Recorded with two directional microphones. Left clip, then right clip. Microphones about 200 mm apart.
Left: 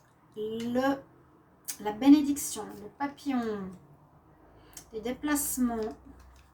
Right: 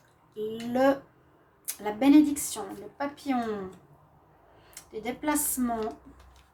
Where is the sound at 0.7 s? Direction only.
40° right (ahead or behind).